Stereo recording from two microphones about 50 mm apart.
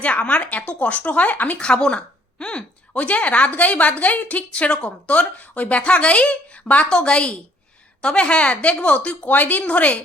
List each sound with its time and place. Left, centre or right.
0.0 s speech: left
1.5 s speech: centre